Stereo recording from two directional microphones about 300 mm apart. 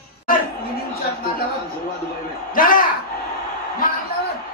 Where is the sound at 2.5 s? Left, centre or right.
Left.